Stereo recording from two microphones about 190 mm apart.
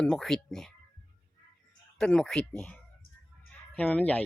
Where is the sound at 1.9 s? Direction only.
5° left (ahead or behind).